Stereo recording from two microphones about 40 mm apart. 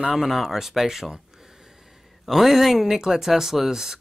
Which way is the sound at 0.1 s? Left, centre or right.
Centre.